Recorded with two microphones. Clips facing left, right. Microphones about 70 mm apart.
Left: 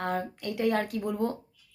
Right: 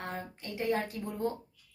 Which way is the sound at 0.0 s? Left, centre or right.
Left.